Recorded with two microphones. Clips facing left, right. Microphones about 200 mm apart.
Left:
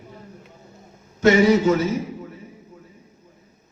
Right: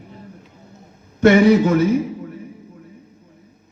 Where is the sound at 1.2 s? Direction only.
55° right (ahead or behind).